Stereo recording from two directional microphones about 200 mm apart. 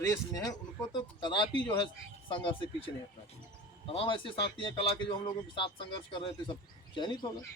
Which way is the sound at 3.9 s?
25° left (ahead or behind).